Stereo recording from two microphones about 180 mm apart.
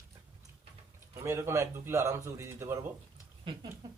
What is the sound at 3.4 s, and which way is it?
Speech, 25° right (ahead or behind).